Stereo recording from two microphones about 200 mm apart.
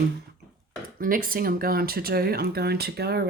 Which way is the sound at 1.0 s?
45° right (ahead or behind).